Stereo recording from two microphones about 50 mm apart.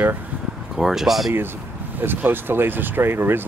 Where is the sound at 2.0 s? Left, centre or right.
Right.